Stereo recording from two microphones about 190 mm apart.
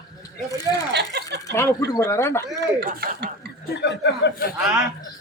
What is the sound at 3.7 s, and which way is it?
Speech, 65° left (ahead or behind).